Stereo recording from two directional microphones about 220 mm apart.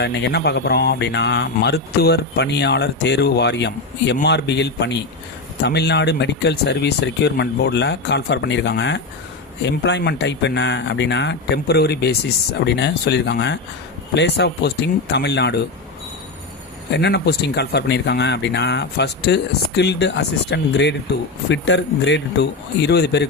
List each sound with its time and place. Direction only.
0.0 s speech: 50° left (ahead or behind)
16.9 s speech: 50° left (ahead or behind)